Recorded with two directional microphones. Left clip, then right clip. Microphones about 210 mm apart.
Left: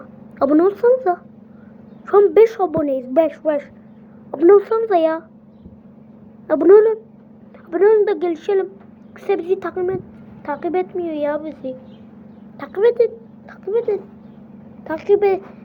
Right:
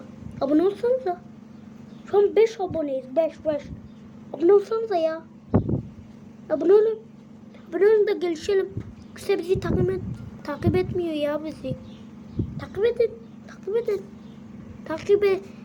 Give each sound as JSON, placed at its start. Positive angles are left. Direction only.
{"t": 0.3, "sound": "a woman's voice", "side_deg": 10}
{"t": 6.5, "sound": "speech", "side_deg": 15}
{"t": 7.7, "sound": "a woman's voice", "side_deg": 0}
{"t": 12.5, "sound": "speech", "side_deg": 10}
{"t": 13.7, "sound": "a woman's voice", "side_deg": 0}